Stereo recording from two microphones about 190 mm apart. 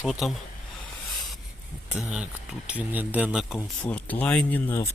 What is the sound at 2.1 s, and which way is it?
Speech, 5° right (ahead or behind).